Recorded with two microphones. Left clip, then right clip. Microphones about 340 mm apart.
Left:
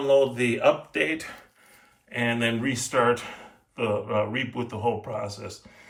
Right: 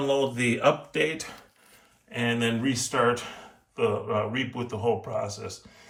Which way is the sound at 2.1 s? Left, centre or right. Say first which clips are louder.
Left 1 dB; centre.